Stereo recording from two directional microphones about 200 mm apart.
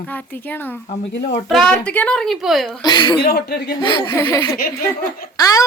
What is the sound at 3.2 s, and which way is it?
Speech, 55° left (ahead or behind).